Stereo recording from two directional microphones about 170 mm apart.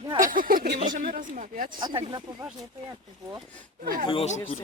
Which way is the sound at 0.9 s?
50° right (ahead or behind).